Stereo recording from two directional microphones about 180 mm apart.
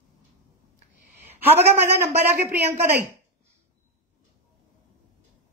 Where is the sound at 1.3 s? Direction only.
10° right (ahead or behind).